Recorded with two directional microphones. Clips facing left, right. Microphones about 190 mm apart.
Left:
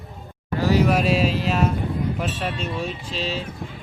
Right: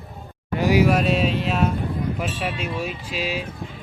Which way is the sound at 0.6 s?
10° right (ahead or behind).